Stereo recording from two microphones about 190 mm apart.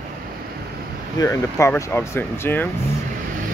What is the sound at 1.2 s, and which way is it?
Speech, 15° left (ahead or behind).